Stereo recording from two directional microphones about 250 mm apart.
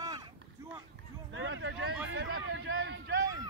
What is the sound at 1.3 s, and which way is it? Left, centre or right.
Speech, right.